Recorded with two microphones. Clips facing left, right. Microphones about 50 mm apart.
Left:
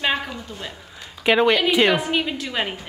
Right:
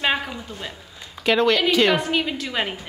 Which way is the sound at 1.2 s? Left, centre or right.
Centre.